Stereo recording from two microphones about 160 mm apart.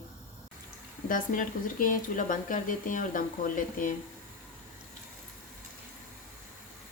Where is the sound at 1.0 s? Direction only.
60° left (ahead or behind).